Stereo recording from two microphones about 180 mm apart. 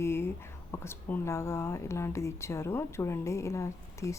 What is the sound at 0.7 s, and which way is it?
A woman's voice, 15° left (ahead or behind).